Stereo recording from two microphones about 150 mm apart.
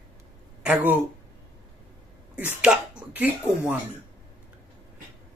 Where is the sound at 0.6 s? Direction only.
10° right (ahead or behind).